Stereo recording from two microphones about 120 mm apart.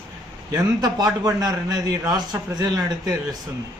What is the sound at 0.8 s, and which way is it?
A man's voice, 30° right (ahead or behind).